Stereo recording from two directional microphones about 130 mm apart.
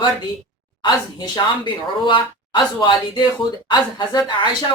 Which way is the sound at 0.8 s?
30° left (ahead or behind).